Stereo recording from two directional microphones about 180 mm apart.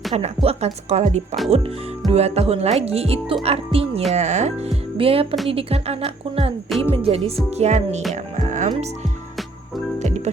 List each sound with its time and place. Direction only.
0.1 s speech: 35° right (ahead or behind)
10.0 s music: 40° right (ahead or behind)